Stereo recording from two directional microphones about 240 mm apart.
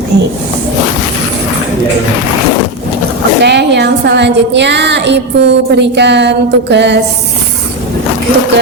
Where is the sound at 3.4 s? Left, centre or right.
Right.